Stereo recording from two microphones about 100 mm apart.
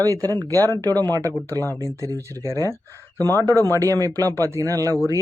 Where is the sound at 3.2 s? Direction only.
30° left (ahead or behind).